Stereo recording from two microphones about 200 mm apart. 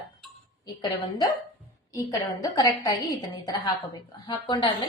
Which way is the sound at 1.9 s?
15° left (ahead or behind).